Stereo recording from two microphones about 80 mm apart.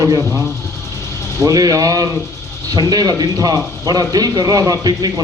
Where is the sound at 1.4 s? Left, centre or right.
Right.